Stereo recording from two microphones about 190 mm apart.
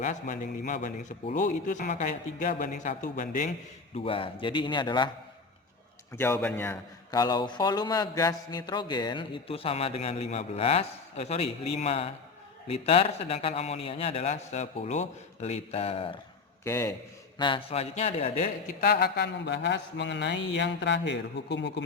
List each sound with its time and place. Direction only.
0.0 s a man's voice: 40° left (ahead or behind)
3.9 s a man's voice: 30° left (ahead or behind)
6.1 s a man's voice: 10° left (ahead or behind); by 16.1 s 30° left (ahead or behind)
16.6 s a man's voice: 15° left (ahead or behind); by 21.7 s 65° left (ahead or behind)